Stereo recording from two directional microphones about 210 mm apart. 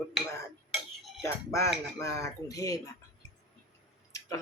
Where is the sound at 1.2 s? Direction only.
15° left (ahead or behind).